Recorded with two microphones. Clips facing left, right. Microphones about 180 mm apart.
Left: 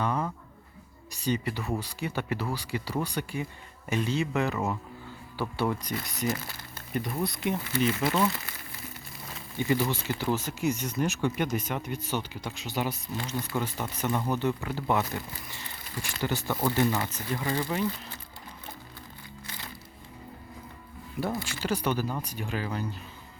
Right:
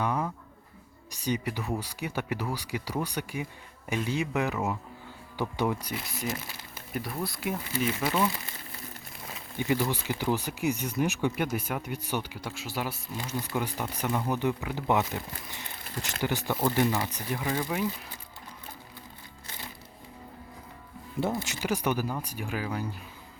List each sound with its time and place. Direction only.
0.0 s a sound: 10° right (ahead or behind)
1.1 s speech: 15° right (ahead or behind)
9.6 s speech: 15° right (ahead or behind)
21.2 s speech: 20° right (ahead or behind)